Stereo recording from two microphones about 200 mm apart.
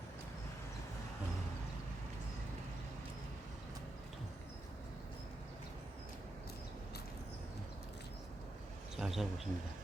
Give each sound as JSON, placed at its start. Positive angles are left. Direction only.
{"t": 9.0, "sound": "speech", "side_deg": 0}